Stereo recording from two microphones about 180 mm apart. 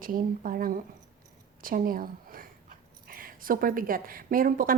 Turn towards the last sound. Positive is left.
turn(degrees=-50)  # may be behind; listen again after turning